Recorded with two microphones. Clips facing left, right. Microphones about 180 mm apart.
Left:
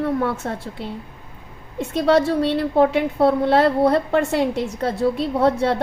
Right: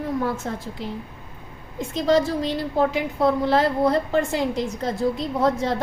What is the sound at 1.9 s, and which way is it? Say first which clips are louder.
A woman's voice: left 3 dB; 65° left (ahead or behind).